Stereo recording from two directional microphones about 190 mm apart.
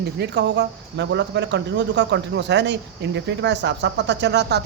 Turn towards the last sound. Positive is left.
turn(degrees=-65)  # may be behind; listen again after turning